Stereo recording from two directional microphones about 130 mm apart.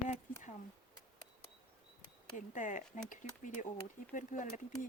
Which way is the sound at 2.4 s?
80° left.